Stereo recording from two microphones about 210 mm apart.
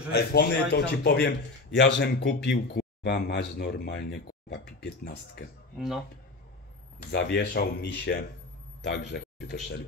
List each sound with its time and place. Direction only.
0.1 s a man's voice: 50° left (ahead or behind)
7.1 s a man's voice: 50° left (ahead or behind)